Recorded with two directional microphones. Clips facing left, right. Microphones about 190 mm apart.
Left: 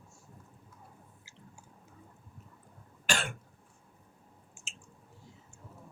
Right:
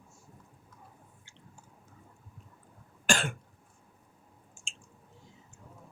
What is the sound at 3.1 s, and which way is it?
Cough, 50° right (ahead or behind).